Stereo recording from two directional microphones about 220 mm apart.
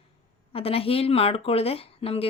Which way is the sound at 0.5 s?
25° left (ahead or behind).